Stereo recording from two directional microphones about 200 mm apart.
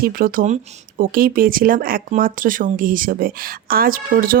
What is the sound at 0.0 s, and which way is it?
Speech, 45° right (ahead or behind).